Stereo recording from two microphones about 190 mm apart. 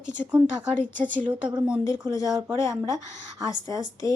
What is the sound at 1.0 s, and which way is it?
Speech, 45° right (ahead or behind).